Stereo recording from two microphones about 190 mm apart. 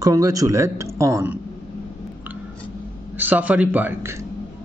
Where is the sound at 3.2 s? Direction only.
10° right (ahead or behind).